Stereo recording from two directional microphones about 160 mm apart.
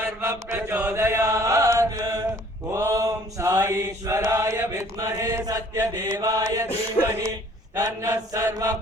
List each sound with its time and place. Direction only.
0.2 s chant: 15° right (ahead or behind)
2.7 s mantra: 20° right (ahead or behind)
7.0 s speech: 15° right (ahead or behind)
7.8 s mantra: 20° right (ahead or behind)